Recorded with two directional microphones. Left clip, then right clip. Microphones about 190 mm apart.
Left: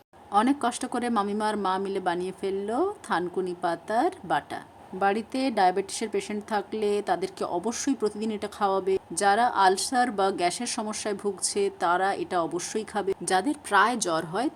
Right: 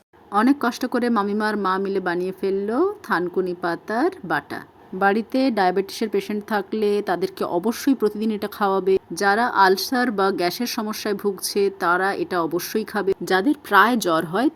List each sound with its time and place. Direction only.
0.3 s speech: 15° right (ahead or behind)